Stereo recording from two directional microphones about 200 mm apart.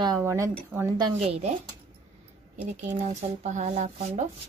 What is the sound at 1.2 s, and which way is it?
Speech, 35° right (ahead or behind).